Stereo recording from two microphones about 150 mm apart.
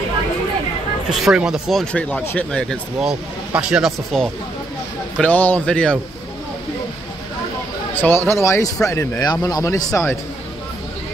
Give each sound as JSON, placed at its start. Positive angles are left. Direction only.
{"t": 1.2, "sound": "speech", "side_deg": -5}
{"t": 3.0, "sound": "speech", "side_deg": -5}
{"t": 5.2, "sound": "speech", "side_deg": 10}
{"t": 7.9, "sound": "speech", "side_deg": 15}